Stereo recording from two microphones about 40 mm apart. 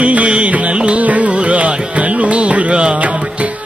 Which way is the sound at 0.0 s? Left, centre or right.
Right.